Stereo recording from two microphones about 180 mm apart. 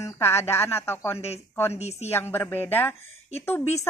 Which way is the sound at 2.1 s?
10° left (ahead or behind).